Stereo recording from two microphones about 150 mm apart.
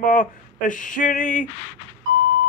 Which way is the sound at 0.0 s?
60° left (ahead or behind).